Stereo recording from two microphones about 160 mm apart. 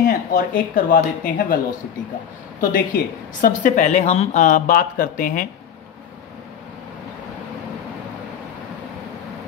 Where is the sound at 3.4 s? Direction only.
55° left (ahead or behind).